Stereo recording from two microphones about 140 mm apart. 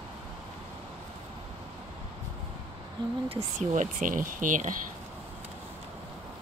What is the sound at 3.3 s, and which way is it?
Speech, 50° right (ahead or behind).